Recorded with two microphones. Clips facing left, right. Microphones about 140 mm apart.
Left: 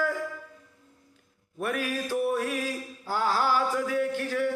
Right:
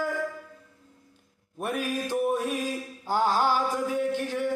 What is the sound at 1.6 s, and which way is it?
Singing, 20° right (ahead or behind).